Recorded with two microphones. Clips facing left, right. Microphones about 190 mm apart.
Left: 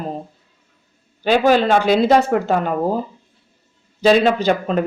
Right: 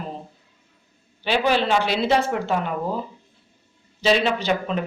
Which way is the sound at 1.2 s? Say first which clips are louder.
Left 6 dB; 45° left (ahead or behind).